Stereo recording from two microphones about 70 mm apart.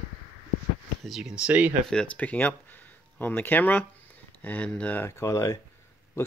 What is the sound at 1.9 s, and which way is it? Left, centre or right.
Speech, centre.